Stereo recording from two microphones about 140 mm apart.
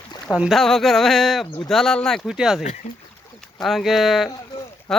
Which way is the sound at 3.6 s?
Centre (ahead or behind).